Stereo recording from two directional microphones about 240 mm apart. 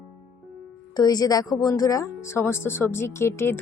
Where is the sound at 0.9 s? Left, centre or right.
Centre.